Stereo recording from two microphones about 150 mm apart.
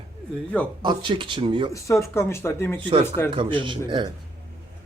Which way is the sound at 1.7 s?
20° left (ahead or behind).